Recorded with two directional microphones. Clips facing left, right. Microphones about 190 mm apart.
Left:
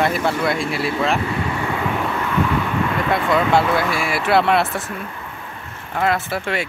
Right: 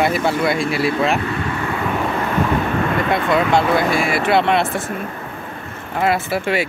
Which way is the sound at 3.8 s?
50° right (ahead or behind).